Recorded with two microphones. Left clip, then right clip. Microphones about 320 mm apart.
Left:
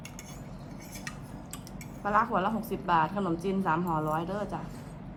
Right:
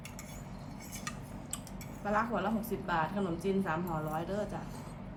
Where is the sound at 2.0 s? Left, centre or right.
Centre.